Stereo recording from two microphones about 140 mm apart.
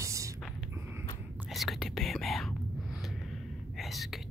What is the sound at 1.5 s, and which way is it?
Speech, centre (ahead or behind).